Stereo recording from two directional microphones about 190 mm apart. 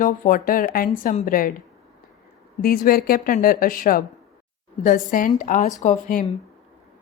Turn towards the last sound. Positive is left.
turn(degrees=40)  # may be behind; listen again after turning